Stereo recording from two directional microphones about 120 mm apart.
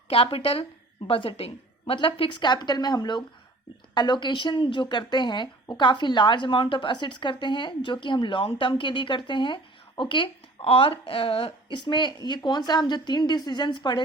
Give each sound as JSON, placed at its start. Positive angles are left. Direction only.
{"t": 0.1, "sound": "a woman's voice", "side_deg": 50}